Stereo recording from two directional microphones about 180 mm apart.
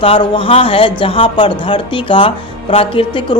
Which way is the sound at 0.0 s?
30° left (ahead or behind).